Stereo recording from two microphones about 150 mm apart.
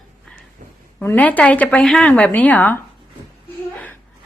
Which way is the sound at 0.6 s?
60° right (ahead or behind).